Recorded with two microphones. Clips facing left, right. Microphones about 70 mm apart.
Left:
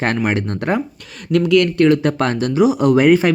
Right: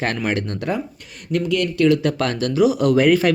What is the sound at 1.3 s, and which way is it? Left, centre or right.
Speech, left.